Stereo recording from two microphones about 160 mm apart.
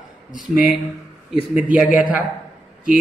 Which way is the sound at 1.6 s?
5° right (ahead or behind).